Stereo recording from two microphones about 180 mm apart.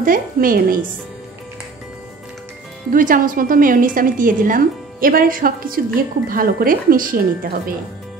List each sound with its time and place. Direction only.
0.0 s a woman's voice: 50° right (ahead or behind)
2.9 s a woman's voice: 50° right (ahead or behind)